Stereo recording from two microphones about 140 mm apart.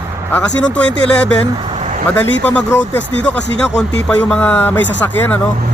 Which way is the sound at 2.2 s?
10° left (ahead or behind).